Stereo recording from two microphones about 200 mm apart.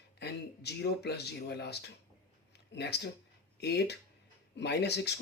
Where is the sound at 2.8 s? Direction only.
55° left (ahead or behind).